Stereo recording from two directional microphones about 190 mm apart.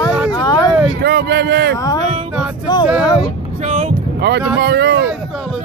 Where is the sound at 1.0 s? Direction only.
60° right (ahead or behind).